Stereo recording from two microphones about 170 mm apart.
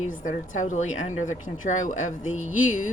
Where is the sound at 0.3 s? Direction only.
45° left (ahead or behind).